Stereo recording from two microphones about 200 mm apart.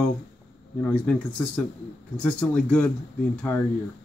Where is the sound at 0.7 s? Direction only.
5° left (ahead or behind).